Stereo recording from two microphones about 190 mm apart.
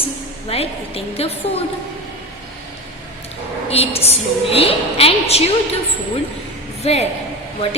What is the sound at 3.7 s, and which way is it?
A woman's voice, 30° left (ahead or behind).